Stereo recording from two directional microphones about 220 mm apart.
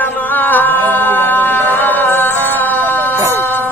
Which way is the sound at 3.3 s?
10° left (ahead or behind).